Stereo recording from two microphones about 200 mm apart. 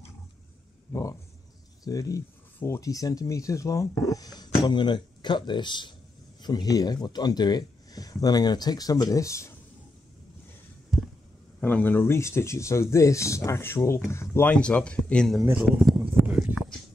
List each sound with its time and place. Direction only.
1.9 s speech: 15° left (ahead or behind)
11.6 s speech: 10° left (ahead or behind)
16.0 s a sound: 5° right (ahead or behind)